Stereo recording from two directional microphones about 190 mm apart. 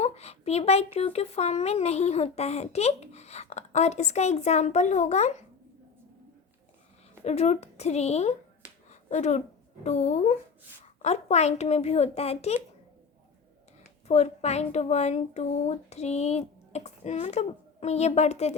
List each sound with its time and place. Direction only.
0.0 s a sound: 35° left (ahead or behind)
0.9 s a child's voice: 35° left (ahead or behind)
7.3 s a child's voice: 35° left (ahead or behind)
8.9 s finger snapping: 35° left (ahead or behind)
9.8 s a child's voice: 35° left (ahead or behind)
14.1 s a child's voice: 35° left (ahead or behind)